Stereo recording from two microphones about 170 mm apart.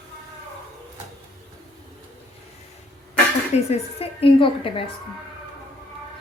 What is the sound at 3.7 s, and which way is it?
A woman's voice, 35° left (ahead or behind).